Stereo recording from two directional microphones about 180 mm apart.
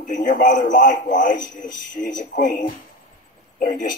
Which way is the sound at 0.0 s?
45° left (ahead or behind).